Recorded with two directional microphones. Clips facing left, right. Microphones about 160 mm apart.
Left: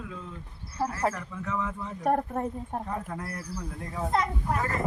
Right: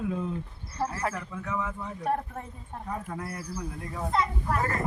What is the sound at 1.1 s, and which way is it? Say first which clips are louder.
Speech: even; 5° right (ahead or behind).